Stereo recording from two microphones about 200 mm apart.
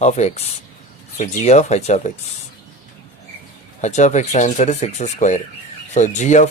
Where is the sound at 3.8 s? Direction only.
35° left (ahead or behind).